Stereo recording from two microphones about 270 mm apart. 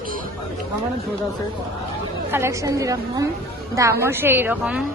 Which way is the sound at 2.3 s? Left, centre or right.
Centre.